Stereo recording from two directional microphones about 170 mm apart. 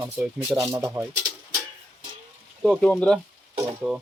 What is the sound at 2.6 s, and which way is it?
Speech, centre (ahead or behind).